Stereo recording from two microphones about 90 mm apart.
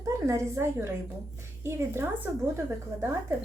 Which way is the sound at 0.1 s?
30° right (ahead or behind).